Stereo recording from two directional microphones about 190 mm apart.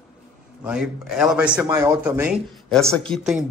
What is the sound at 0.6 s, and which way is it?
A man's voice, 5° right (ahead or behind).